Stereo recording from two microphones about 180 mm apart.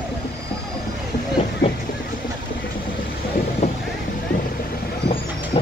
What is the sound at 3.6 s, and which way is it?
Vehicle, 40° left (ahead or behind).